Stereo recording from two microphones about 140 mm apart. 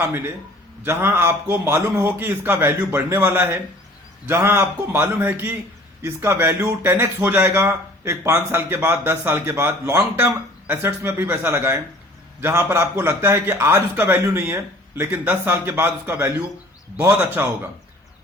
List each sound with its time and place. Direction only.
0.9 s a man's voice: 15° right (ahead or behind)